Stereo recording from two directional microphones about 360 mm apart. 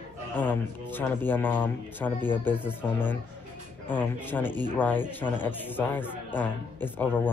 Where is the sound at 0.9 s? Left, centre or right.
Centre.